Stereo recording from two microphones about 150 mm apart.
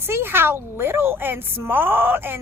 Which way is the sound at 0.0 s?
15° right (ahead or behind).